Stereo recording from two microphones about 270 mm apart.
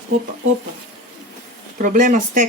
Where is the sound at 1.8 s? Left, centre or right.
Right.